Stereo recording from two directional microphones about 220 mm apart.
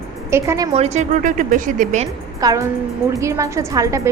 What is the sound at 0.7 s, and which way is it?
Speech, 30° right (ahead or behind).